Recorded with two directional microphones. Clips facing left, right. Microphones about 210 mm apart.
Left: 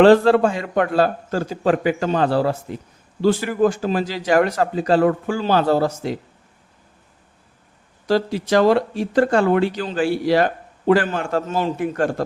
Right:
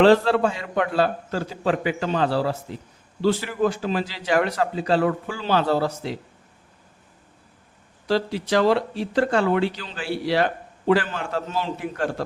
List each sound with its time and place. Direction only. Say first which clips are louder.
0.0 s speech: left 4 dB; 50° left (ahead or behind)
8.0 s speech: left 4 dB; 45° left (ahead or behind)